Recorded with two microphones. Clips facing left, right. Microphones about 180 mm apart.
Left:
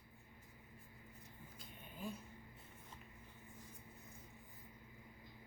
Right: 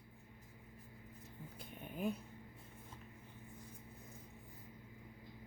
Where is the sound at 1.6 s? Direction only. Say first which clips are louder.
Right 8 dB; 60° right (ahead or behind).